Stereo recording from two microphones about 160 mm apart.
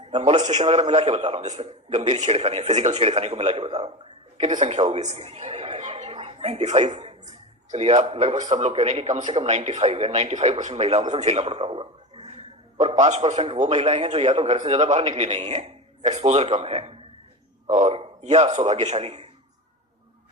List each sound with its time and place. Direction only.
0.1 s a man's voice: 45° right (ahead or behind)
0.3 s a man's voice: 25° right (ahead or behind)
0.6 s a man's voice: 45° right (ahead or behind)
4.8 s a woman's voice: 35° right (ahead or behind)
13.0 s a man's voice: 45° right (ahead or behind)